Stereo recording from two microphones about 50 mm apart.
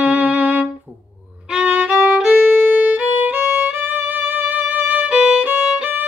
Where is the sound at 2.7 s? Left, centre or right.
Right.